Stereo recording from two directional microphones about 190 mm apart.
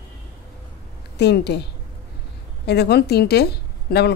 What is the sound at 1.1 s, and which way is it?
A woman's voice, 60° left (ahead or behind).